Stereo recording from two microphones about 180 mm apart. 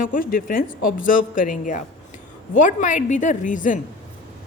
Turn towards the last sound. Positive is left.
turn(degrees=45)  # may be behind; listen again after turning